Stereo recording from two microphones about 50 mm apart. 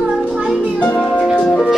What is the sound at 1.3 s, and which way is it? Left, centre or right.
Music, left.